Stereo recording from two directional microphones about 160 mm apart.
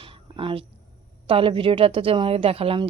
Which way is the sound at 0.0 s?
35° right (ahead or behind).